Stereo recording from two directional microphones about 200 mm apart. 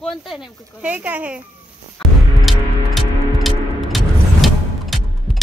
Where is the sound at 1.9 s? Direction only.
Centre (ahead or behind).